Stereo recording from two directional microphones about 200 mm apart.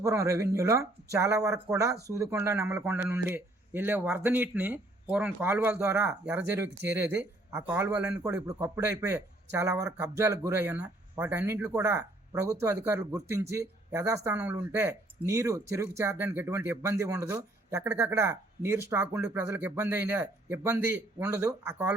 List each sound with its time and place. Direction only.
0.0 s speech: 15° right (ahead or behind)